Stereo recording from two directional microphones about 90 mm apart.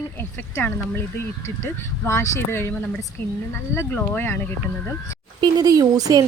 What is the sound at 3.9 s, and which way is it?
Speech, 20° left (ahead or behind).